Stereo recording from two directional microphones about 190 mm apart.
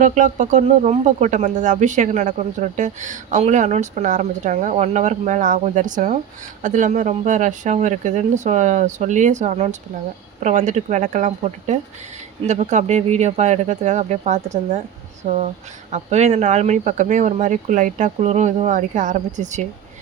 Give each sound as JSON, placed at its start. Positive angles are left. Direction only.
{"t": 0.0, "sound": "speech", "side_deg": -40}